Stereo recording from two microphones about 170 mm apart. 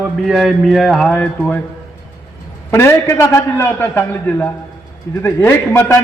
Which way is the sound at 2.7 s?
15° left (ahead or behind).